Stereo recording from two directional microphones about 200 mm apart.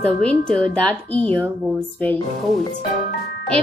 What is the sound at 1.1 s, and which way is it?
Speech, 25° right (ahead or behind).